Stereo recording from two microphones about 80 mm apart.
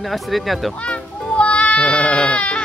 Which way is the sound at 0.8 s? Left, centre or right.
Centre.